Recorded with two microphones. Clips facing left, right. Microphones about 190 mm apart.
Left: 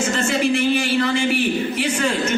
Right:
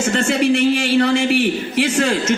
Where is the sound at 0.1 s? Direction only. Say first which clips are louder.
Right 6 dB; 65° right (ahead or behind).